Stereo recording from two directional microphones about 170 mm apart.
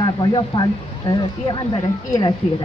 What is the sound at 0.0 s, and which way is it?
A woman's voice, 25° left (ahead or behind).